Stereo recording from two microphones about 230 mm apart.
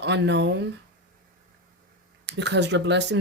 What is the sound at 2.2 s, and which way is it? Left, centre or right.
Speech, right.